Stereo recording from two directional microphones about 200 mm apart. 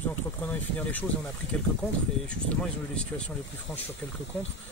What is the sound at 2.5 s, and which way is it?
Speech, 5° left (ahead or behind).